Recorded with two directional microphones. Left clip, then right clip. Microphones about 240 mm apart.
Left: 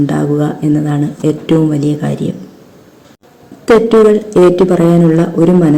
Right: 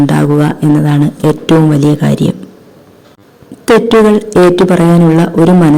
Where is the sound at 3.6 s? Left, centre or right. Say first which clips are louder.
Even; right.